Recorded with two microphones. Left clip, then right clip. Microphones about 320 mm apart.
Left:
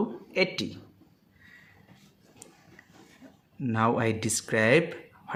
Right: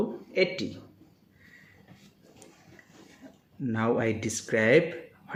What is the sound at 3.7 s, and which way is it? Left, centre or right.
Speech, left.